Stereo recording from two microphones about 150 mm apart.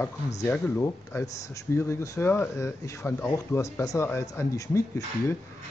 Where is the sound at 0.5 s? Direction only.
15° left (ahead or behind).